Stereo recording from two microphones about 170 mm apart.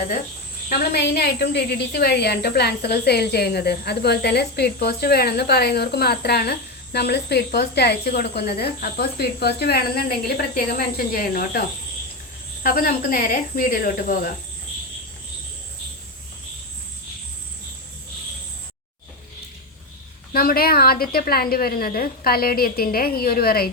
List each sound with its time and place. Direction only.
0.7 s a woman's voice: 70° left (ahead or behind)
12.6 s a woman's voice: 60° left (ahead or behind)
20.3 s a woman's voice: 60° left (ahead or behind)